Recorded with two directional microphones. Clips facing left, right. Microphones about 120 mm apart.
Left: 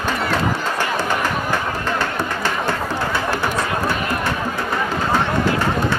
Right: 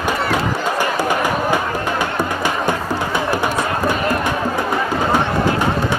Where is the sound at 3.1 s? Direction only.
15° right (ahead or behind).